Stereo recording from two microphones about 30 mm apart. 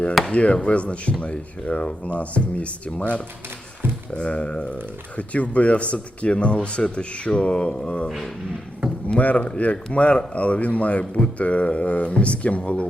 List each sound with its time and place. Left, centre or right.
0.3 s speech: left
4.2 s speech: left
9.1 s speech: left